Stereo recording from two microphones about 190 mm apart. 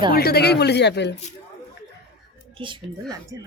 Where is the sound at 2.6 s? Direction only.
25° right (ahead or behind).